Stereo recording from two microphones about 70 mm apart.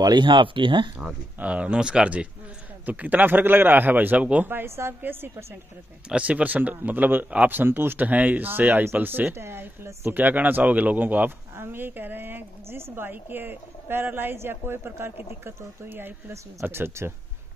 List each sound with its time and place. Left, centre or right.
0.0 s speech: right
1.0 s speech: centre
4.5 s speech: right
6.0 s speech: centre; by 17.1 s right